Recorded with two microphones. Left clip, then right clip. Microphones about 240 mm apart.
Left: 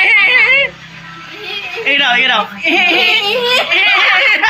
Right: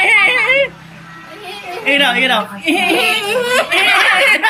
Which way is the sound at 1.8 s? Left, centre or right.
Centre.